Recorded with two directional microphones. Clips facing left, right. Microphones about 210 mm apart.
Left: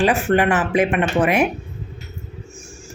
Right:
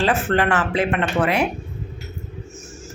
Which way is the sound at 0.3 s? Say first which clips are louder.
Left 2 dB; 15° left (ahead or behind).